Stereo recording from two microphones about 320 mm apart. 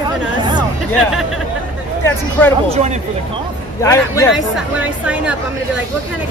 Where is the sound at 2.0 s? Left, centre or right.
Centre.